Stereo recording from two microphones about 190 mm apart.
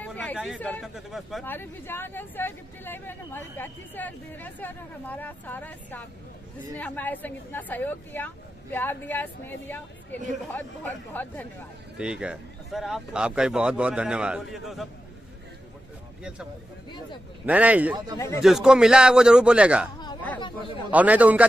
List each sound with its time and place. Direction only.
0.0 s a sound: 10° left (ahead or behind)
0.6 s speech: 5° left (ahead or behind)
1.4 s speech: 10° left (ahead or behind)
12.0 s speech: 5° right (ahead or behind)
17.5 s a man's voice: 5° right (ahead or behind)
20.3 s a man's voice: 25° left (ahead or behind)
20.9 s a man's voice: 10° right (ahead or behind)